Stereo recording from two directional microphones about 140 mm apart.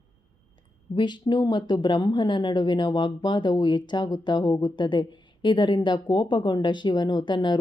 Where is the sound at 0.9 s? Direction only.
35° left (ahead or behind).